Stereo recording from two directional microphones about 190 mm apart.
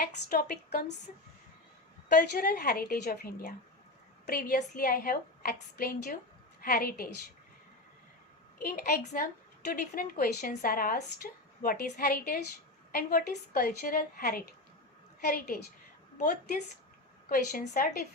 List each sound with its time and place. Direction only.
0.3 s a woman's voice: 55° left (ahead or behind)
2.0 s a woman's voice: 50° left (ahead or behind)
8.6 s a woman's voice: 50° left (ahead or behind)
17.2 s a woman's voice: 45° left (ahead or behind)